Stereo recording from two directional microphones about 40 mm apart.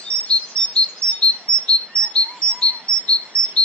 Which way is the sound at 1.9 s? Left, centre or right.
Left.